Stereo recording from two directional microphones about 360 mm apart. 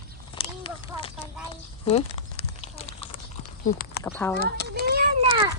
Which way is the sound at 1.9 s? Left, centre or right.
Centre.